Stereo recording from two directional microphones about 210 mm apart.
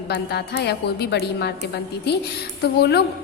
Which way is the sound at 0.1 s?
50° left (ahead or behind).